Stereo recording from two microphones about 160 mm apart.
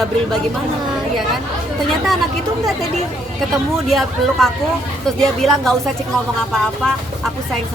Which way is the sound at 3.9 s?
Centre (ahead or behind).